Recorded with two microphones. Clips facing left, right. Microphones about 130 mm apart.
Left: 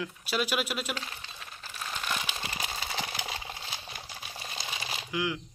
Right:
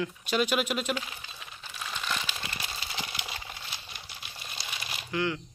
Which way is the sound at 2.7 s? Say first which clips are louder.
Left 3 dB; 50° left (ahead or behind).